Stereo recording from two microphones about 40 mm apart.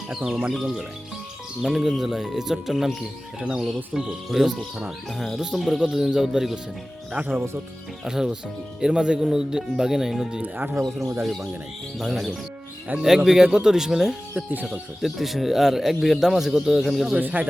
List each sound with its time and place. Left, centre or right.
0.3 s speech: centre
1.6 s speech: centre
4.9 s cricket: centre
6.1 s speech: centre
7.2 s speech: right
8.0 s speech: centre
10.4 s speech: right
11.2 s cricket: centre
13.0 s speech: centre
14.3 s speech: right
15.0 s speech: centre
17.2 s speech: right